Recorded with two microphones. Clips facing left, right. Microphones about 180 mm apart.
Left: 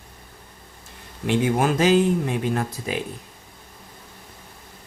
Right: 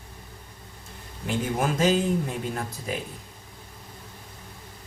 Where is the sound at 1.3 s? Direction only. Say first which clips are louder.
Left 6 dB; 80° left.